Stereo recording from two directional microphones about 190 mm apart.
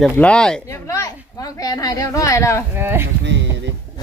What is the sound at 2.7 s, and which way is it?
Speech, 10° right (ahead or behind).